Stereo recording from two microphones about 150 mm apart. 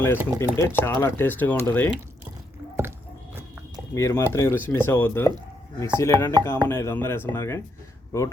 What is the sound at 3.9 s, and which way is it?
Speech, 20° left (ahead or behind).